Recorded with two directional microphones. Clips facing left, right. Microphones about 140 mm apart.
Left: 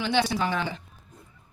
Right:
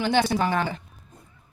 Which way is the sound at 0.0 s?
50° right (ahead or behind).